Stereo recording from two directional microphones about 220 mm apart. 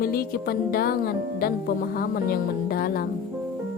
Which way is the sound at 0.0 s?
45° left (ahead or behind).